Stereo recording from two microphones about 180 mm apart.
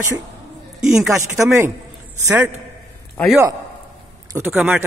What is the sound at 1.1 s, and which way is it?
Speech, 15° right (ahead or behind).